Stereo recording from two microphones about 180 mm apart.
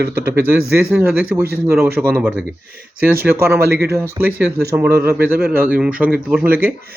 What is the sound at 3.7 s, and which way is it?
Speech, 65° right (ahead or behind).